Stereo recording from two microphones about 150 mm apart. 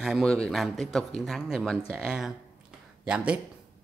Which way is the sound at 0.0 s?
Centre (ahead or behind).